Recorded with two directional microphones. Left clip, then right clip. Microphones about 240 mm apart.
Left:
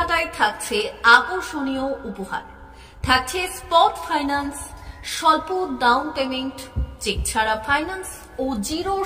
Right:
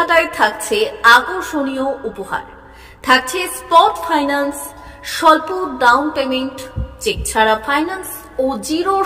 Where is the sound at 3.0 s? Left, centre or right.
Centre.